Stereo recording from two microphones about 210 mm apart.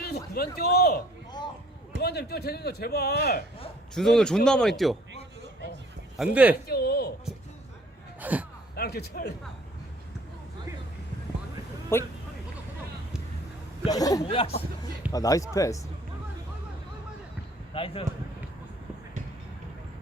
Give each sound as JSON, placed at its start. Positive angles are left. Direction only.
{"t": 0.0, "sound": "a man's voice", "side_deg": 50}
{"t": 3.9, "sound": "speech", "side_deg": 0}
{"t": 6.1, "sound": "speech", "side_deg": -5}
{"t": 6.7, "sound": "speech", "side_deg": 50}
{"t": 8.2, "sound": "speech", "side_deg": -5}
{"t": 8.7, "sound": "speech", "side_deg": 50}
{"t": 11.9, "sound": "a man's voice", "side_deg": 10}
{"t": 13.8, "sound": "a man's voice", "side_deg": 15}
{"t": 17.7, "sound": "speech", "side_deg": 25}